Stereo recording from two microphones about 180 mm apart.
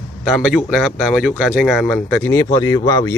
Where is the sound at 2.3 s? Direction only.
20° left (ahead or behind).